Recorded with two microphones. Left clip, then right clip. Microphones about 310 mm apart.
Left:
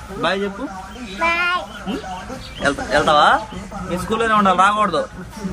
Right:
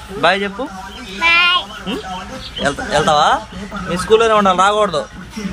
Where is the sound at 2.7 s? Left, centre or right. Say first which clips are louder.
Right 1 dB; right.